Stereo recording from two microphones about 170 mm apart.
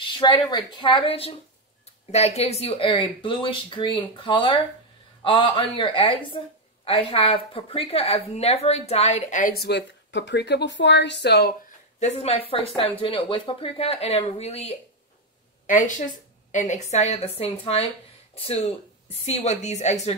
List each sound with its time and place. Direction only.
0.0 s a woman's voice: 25° left (ahead or behind); by 11.5 s 80° left
12.0 s speech: 40° left (ahead or behind)